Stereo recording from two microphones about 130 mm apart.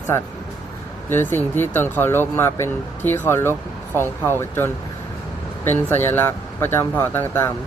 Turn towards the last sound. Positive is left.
turn(degrees=15)  # may be behind; listen again after turning